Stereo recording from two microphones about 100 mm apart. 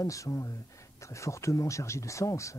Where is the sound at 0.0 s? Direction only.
35° left (ahead or behind).